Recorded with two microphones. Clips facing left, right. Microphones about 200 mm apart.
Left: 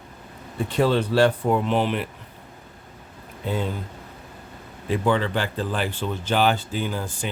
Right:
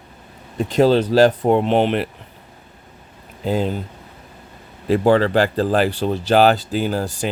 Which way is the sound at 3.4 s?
90° right.